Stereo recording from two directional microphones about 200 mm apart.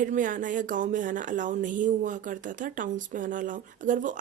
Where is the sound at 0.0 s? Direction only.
40° right (ahead or behind).